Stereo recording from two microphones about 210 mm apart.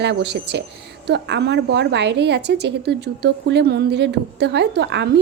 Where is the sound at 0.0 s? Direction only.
55° right (ahead or behind).